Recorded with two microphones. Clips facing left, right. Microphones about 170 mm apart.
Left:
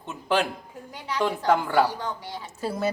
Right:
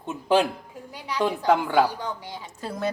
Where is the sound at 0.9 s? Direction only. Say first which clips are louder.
Right 1 dB; 15° right (ahead or behind).